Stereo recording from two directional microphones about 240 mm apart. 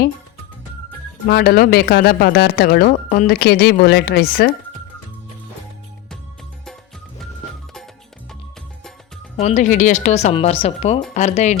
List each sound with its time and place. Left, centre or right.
1.3 s speech: left
9.4 s speech: left